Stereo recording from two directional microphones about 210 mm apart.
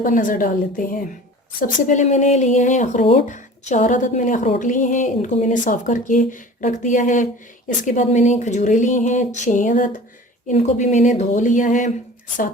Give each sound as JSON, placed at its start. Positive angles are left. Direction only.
{"t": 0.0, "sound": "speech", "side_deg": 40}